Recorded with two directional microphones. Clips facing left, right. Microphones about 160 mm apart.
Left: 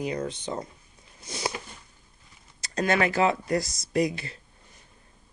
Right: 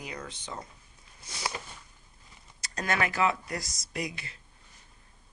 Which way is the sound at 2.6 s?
30° left (ahead or behind).